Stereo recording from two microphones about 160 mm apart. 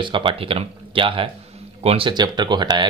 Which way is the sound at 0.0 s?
30° right (ahead or behind).